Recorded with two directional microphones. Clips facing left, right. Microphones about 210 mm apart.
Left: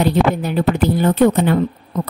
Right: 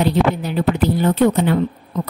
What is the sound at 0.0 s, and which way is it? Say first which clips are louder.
A woman's voice: left 1 dB; 50° left (ahead or behind).